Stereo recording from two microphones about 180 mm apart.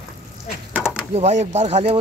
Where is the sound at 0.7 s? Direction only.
5° right (ahead or behind).